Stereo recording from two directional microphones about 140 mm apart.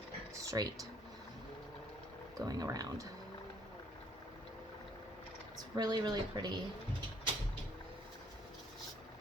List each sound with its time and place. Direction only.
0.4 s speech: 25° right (ahead or behind)
2.4 s speech: 25° right (ahead or behind)
5.5 s speech: 30° right (ahead or behind)